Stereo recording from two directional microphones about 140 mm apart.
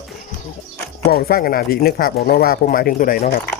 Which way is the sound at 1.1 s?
90° left.